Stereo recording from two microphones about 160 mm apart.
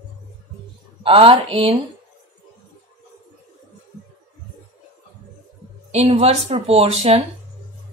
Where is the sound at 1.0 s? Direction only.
35° right (ahead or behind).